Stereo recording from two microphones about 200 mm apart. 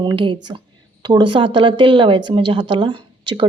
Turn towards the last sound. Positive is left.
turn(degrees=-25)  # may be behind; listen again after turning